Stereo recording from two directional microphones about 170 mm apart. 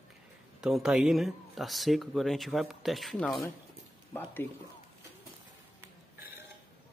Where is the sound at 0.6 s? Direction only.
5° right (ahead or behind).